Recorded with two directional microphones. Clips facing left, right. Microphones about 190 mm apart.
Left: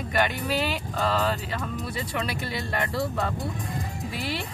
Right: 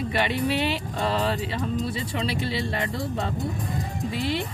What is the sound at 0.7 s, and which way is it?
Music, 35° right (ahead or behind).